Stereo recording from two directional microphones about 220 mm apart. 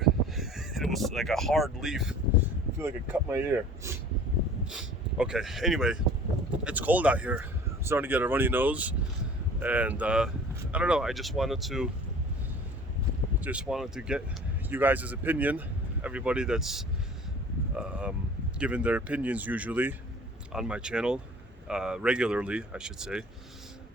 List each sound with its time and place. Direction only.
0.0 s speech: centre (ahead or behind)
13.4 s speech: 5° right (ahead or behind)
17.7 s a sound: 5° right (ahead or behind)
18.6 s speech: 5° right (ahead or behind)